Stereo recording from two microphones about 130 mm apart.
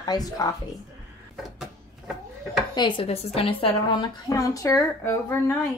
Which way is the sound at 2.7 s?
35° left (ahead or behind).